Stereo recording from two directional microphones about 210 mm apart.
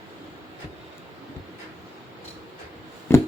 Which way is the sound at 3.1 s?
10° left (ahead or behind).